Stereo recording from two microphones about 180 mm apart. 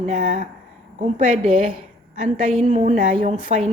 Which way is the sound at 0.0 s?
50° right (ahead or behind).